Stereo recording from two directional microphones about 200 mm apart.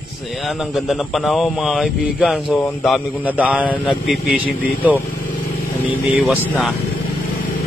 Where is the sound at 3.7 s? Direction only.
5° left (ahead or behind).